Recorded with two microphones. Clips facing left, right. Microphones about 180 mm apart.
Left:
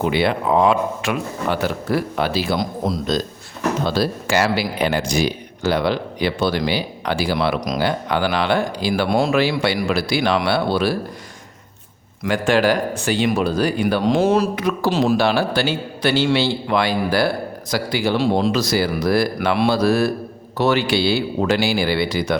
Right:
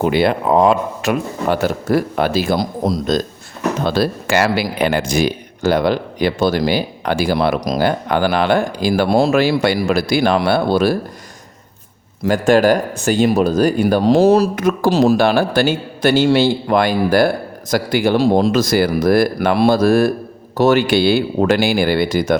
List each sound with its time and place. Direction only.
0.0 s speech: 45° right (ahead or behind)
3.8 s speech: 55° right (ahead or behind)
12.2 s speech: 40° right (ahead or behind)